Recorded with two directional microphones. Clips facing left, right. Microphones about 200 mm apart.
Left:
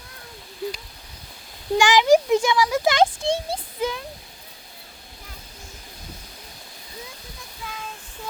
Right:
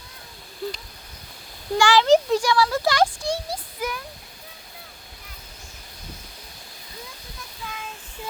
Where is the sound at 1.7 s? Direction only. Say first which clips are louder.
Left 1 dB; 15° left (ahead or behind).